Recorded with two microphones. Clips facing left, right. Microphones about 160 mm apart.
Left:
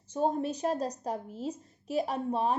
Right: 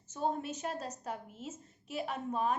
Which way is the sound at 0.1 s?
40° left (ahead or behind).